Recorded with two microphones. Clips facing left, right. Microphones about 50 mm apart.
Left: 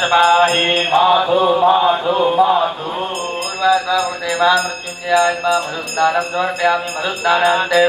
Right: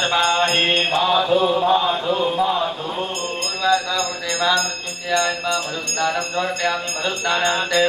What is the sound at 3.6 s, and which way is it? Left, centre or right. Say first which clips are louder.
Music: left 5 dB; centre.